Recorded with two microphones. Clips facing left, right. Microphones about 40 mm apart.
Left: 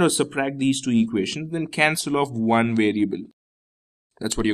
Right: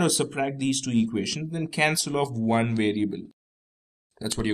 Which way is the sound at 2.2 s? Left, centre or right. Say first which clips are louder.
Left 4 dB; left.